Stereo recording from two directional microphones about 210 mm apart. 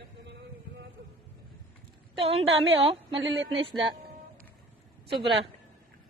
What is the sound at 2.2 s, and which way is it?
A woman's voice, 25° right (ahead or behind).